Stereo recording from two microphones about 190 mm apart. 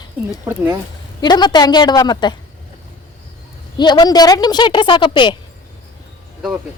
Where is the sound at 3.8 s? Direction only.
20° left (ahead or behind).